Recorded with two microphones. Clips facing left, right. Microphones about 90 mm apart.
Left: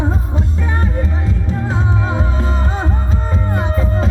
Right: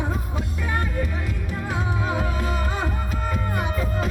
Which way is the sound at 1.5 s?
30° left (ahead or behind).